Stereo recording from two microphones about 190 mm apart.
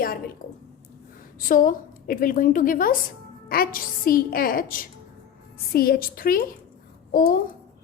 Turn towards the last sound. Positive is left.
turn(degrees=50)  # may be behind; listen again after turning